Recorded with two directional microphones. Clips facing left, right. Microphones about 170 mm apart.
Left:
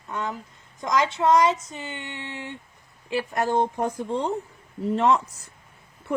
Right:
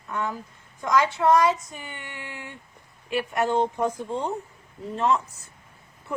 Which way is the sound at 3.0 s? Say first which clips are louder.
Even; 30° left (ahead or behind).